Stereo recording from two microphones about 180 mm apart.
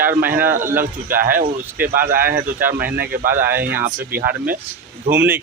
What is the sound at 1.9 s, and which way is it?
Speech, 50° right (ahead or behind).